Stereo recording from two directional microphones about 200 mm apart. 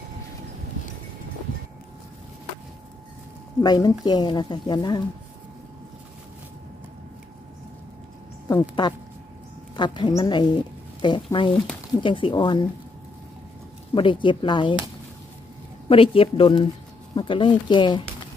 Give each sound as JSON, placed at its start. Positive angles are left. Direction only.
{"t": 3.6, "sound": "speech", "side_deg": 20}
{"t": 8.5, "sound": "speech", "side_deg": 20}
{"t": 13.9, "sound": "speech", "side_deg": 25}
{"t": 15.9, "sound": "speech", "side_deg": 25}